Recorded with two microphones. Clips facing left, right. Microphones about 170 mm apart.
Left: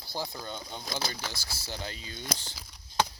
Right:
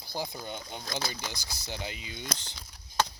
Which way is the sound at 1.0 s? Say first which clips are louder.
Even; 15° right (ahead or behind).